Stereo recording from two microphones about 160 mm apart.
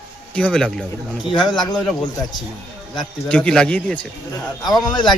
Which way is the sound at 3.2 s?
5° left (ahead or behind).